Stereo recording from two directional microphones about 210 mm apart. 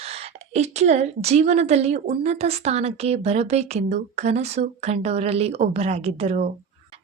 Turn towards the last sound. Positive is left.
turn(degrees=-30)  # may be behind; listen again after turning